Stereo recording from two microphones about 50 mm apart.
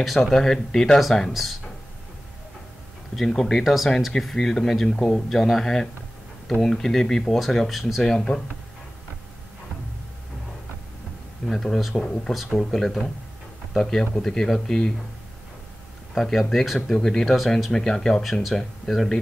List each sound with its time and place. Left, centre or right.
0.0 s speech: centre
3.2 s speech: centre
5.3 s speech: centre
11.4 s speech: centre
16.2 s speech: centre
16.9 s speech: centre
17.8 s speech: centre